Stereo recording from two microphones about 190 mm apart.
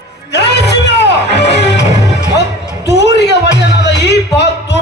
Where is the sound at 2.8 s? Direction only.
60° left (ahead or behind).